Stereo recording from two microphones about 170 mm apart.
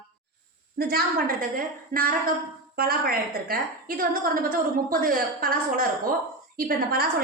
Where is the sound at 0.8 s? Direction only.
60° right (ahead or behind).